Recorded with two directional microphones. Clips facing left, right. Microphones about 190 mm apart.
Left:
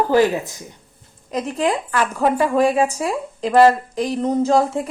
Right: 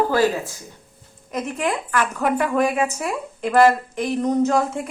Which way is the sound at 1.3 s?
30° left (ahead or behind).